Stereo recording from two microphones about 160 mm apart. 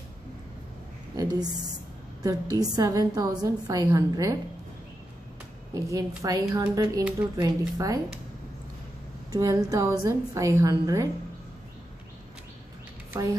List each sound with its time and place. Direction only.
1.1 s a woman's voice: 25° right (ahead or behind)
5.8 s a woman's voice: 20° right (ahead or behind)
9.3 s a woman's voice: 20° right (ahead or behind)
13.1 s a woman's voice: 20° right (ahead or behind)